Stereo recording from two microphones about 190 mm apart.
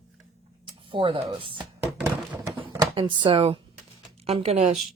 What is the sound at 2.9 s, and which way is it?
Speech, 25° right (ahead or behind).